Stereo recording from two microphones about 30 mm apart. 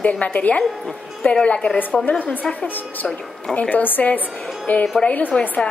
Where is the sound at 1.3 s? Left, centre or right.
Left.